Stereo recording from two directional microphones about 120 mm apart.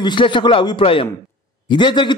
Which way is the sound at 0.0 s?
40° left (ahead or behind).